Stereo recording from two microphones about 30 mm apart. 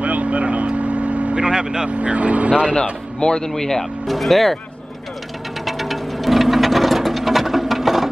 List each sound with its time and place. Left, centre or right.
0.0 s vehicle: right
1.3 s speech: right
1.9 s speech: right
2.7 s speech: left
4.1 s speech: centre
5.7 s a sound: centre